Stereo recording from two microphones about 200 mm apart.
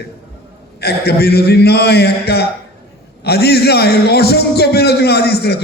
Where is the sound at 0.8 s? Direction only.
55° left (ahead or behind).